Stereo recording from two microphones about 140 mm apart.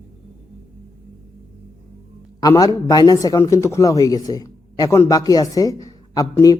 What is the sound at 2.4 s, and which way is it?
Speech, 25° left (ahead or behind).